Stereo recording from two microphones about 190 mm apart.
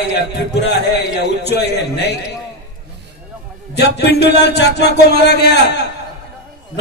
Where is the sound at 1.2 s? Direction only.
60° left (ahead or behind).